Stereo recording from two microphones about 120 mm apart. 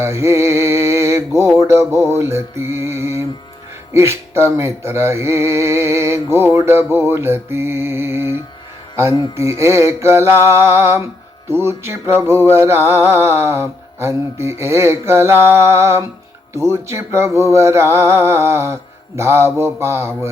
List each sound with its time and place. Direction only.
0.0 s a sound: 20° right (ahead or behind)
1.6 s music: 25° right (ahead or behind)
9.6 s music: 25° right (ahead or behind)